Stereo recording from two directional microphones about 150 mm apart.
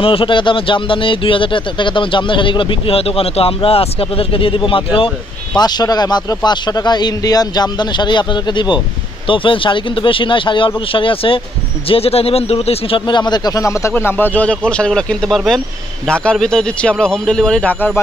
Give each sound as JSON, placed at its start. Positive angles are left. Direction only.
{"t": 0.0, "sound": "a man's voice", "side_deg": 35}